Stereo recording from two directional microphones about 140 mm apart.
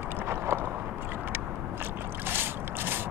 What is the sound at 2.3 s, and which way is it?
Boat, 15° right (ahead or behind).